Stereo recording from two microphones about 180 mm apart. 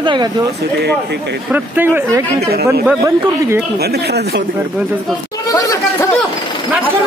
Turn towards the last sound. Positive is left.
turn(degrees=20)  # may be behind; listen again after turning